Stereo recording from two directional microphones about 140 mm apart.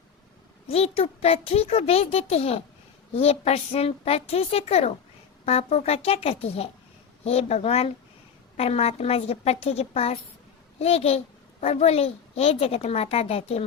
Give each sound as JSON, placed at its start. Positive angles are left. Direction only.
{"t": 0.7, "sound": "a woman's voice", "side_deg": 45}